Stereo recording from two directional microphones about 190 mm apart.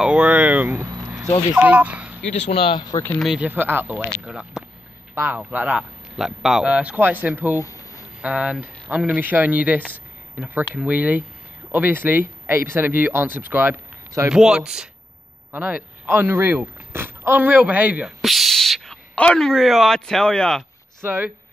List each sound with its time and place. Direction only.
0.0 s a sound: 5° right (ahead or behind)
1.5 s speech: 5° right (ahead or behind)
2.3 s speech: 35° left (ahead or behind); by 3.2 s 15° left (ahead or behind)
3.2 s speech: 5° right (ahead or behind)
7.5 s a sound: 15° left (ahead or behind)
8.2 s speech: 5° right (ahead or behind)
21.0 s speech: 10° right (ahead or behind)